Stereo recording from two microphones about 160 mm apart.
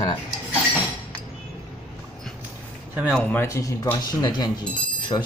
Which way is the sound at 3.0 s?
Centre (ahead or behind).